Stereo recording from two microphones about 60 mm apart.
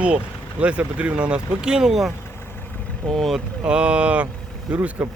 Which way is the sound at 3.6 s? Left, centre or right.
Centre.